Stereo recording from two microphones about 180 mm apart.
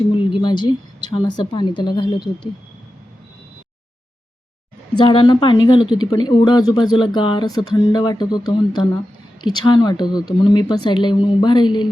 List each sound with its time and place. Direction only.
0.1 s speech: 30° left (ahead or behind)
4.9 s speech: 25° left (ahead or behind)